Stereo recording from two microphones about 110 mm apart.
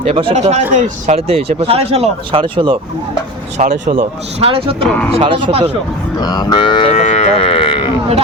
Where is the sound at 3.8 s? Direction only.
80° right; by 5.6 s 55° right (ahead or behind).